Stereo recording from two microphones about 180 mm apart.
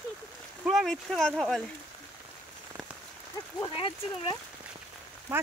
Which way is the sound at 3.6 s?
30° left (ahead or behind).